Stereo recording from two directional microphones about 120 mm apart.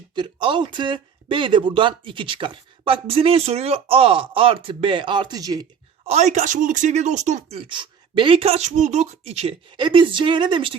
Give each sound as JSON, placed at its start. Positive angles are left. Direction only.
{"t": 0.1, "sound": "speech", "side_deg": -40}
{"t": 6.1, "sound": "speech", "side_deg": -70}
{"t": 7.5, "sound": "speech", "side_deg": -50}
{"t": 9.7, "sound": "speech", "side_deg": -45}